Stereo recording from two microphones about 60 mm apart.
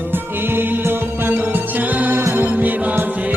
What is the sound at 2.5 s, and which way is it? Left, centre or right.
Music, right.